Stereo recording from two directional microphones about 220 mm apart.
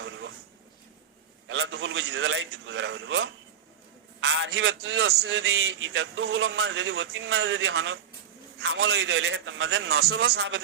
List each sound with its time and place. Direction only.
1.5 s a man's voice: 60° right (ahead or behind)
10.3 s a man's voice: 65° right (ahead or behind)